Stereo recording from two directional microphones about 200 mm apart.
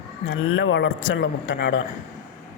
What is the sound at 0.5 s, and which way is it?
A man's voice, 65° left (ahead or behind).